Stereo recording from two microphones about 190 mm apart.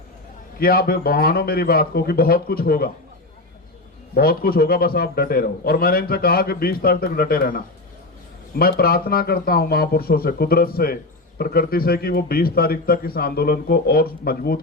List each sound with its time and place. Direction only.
0.6 s a man's voice: 50° left (ahead or behind)
4.1 s a man's voice: 55° left (ahead or behind)